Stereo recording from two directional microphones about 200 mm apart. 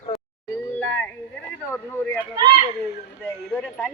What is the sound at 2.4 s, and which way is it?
Speech, 25° right (ahead or behind).